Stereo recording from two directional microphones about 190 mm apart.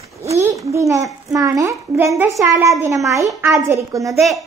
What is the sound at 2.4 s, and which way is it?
A woman's voice, 15° right (ahead or behind).